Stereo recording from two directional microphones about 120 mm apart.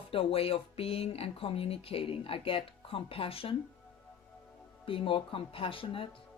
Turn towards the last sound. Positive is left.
turn(degrees=50)  # may be behind; listen again after turning